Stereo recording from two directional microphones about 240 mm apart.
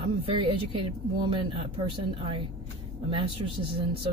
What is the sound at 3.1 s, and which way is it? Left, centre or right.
Speech, right.